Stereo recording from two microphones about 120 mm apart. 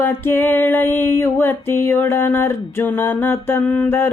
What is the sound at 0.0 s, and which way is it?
Music, 20° left (ahead or behind).